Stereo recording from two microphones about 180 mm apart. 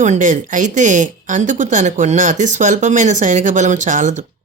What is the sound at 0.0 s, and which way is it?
A woman's voice, 45° right (ahead or behind).